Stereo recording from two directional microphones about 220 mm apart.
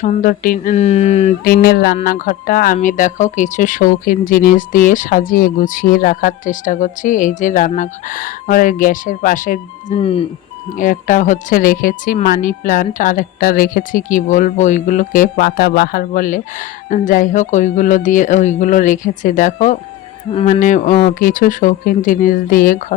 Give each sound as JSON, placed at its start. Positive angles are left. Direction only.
{"t": 0.0, "sound": "speech", "side_deg": 35}
{"t": 1.5, "sound": "a sound", "side_deg": 45}
{"t": 2.0, "sound": "speech", "side_deg": 40}
{"t": 10.8, "sound": "speech", "side_deg": 35}